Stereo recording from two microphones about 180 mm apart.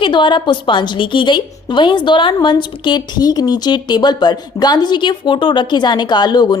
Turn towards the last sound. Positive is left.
turn(degrees=25)  # may be behind; listen again after turning